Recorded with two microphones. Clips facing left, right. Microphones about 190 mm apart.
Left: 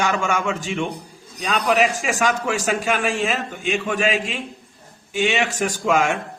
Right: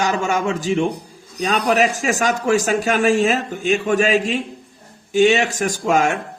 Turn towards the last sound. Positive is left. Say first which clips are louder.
# right 2 dB
turn(degrees=-40)  # may be behind; listen again after turning